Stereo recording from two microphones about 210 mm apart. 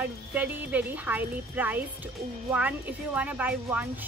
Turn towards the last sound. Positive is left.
turn(degrees=-10)  # may be behind; listen again after turning